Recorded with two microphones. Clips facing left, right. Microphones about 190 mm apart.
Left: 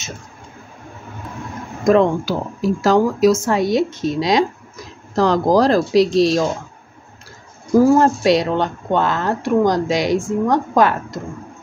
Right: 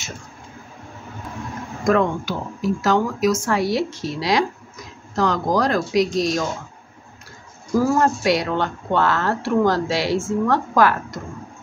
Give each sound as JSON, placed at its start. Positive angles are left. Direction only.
{"t": 1.9, "sound": "speech", "side_deg": 30}
{"t": 5.1, "sound": "speech", "side_deg": 35}
{"t": 7.7, "sound": "speech", "side_deg": 30}